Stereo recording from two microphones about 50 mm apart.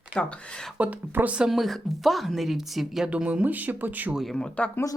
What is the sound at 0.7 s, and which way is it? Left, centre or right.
Speech, right.